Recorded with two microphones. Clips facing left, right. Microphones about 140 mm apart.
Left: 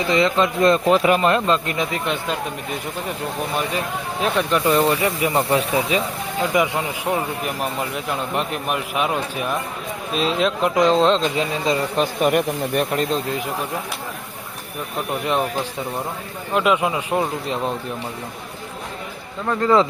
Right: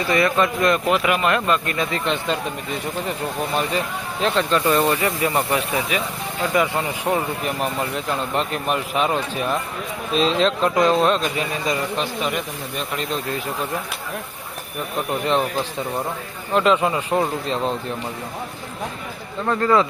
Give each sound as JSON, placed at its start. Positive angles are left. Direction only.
{"t": 0.1, "sound": "speech", "side_deg": 20}
{"t": 4.2, "sound": "speech", "side_deg": 15}
{"t": 6.5, "sound": "speech", "side_deg": 15}
{"t": 7.1, "sound": "speech", "side_deg": 5}
{"t": 11.9, "sound": "speech", "side_deg": 50}
{"t": 16.6, "sound": "speech", "side_deg": 10}
{"t": 19.5, "sound": "speech", "side_deg": 20}